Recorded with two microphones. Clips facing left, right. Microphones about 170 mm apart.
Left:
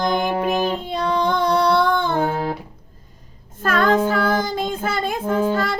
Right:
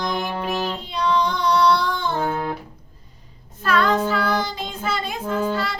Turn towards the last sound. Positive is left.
turn(degrees=50)  # may be behind; listen again after turning